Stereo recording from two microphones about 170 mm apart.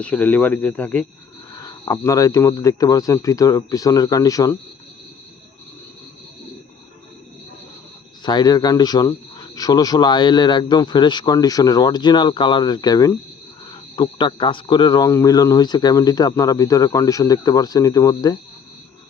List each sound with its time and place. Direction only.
0.0 s speech: 10° left (ahead or behind)
1.5 s speech: 20° left (ahead or behind)
8.2 s speech: 25° left (ahead or behind)